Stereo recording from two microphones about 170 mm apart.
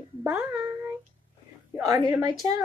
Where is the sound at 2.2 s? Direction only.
25° right (ahead or behind).